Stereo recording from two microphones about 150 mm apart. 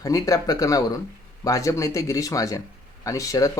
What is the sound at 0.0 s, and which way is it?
Speech, 25° left (ahead or behind).